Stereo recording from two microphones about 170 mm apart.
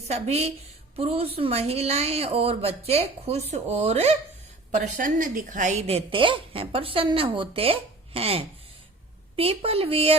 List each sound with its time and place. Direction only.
0.1 s a woman's voice: 40° right (ahead or behind)
4.7 s a woman's voice: 50° right (ahead or behind); by 10.2 s 35° right (ahead or behind)